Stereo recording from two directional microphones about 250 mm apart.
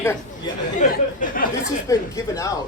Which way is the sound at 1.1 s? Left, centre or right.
Left.